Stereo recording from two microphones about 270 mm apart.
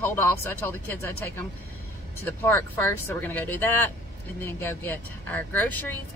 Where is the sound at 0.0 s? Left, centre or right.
Centre.